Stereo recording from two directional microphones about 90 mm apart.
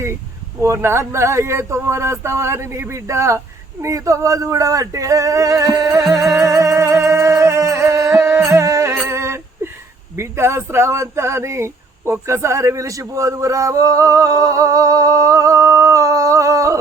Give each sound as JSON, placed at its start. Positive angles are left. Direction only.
{"t": 0.6, "sound": "speech", "side_deg": -30}
{"t": 6.2, "sound": "music", "side_deg": 0}
{"t": 6.5, "sound": "music", "side_deg": -35}
{"t": 9.0, "sound": "a sound", "side_deg": -30}
{"t": 10.2, "sound": "speech", "side_deg": -30}